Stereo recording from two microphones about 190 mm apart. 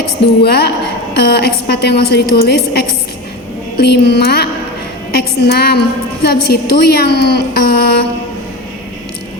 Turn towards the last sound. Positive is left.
turn(degrees=60)  # may be behind; listen again after turning